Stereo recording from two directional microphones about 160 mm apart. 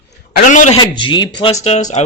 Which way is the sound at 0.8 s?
30° left (ahead or behind).